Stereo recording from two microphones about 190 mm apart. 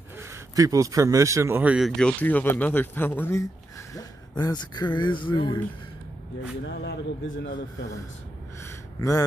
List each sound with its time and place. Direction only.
0.2 s speech: 15° right (ahead or behind)
2.0 s speech: 5° left (ahead or behind); by 5.6 s 25° left (ahead or behind)
6.6 s speech: 60° left (ahead or behind)
8.6 s a sound: 15° left (ahead or behind)